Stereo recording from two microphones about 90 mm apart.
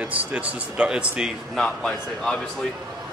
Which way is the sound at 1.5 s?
5° left (ahead or behind).